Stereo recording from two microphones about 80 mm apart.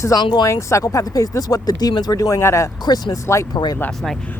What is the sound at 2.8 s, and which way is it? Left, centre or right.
Speech, left.